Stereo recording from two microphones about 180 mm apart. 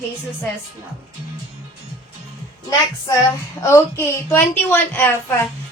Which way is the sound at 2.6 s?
15° left (ahead or behind).